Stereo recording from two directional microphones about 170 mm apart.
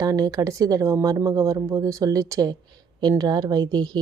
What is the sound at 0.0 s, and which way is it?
Speech, 20° right (ahead or behind).